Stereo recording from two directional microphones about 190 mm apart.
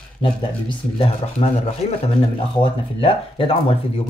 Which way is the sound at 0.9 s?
30° left (ahead or behind).